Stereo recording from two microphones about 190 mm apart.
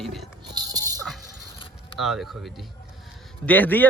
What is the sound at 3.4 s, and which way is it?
Speech, 10° left (ahead or behind).